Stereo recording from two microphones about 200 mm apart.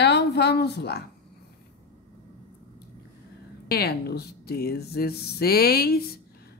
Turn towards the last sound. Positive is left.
turn(degrees=50)  # may be behind; listen again after turning